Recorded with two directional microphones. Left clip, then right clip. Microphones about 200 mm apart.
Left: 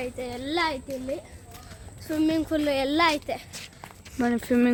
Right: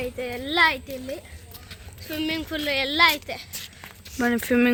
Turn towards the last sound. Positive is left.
turn(degrees=0)  # may be behind; listen again after turning